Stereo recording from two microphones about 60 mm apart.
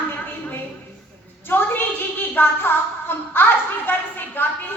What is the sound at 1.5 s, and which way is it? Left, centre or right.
A woman's voice, left.